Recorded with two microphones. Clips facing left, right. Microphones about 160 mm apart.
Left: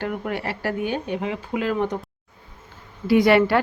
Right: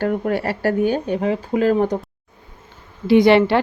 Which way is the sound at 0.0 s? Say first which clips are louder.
Right 7 dB; 40° right (ahead or behind).